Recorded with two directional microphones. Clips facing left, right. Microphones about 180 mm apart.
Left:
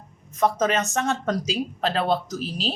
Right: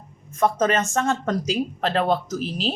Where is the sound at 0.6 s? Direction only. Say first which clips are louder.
Right 2 dB; 50° right (ahead or behind).